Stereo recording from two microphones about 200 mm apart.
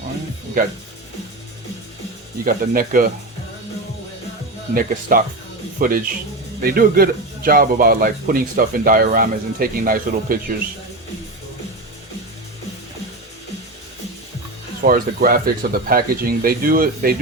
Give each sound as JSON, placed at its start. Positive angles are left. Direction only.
{"t": 2.4, "sound": "a man's voice", "side_deg": -45}
{"t": 4.7, "sound": "a man's voice", "side_deg": -45}
{"t": 14.8, "sound": "a man's voice", "side_deg": -45}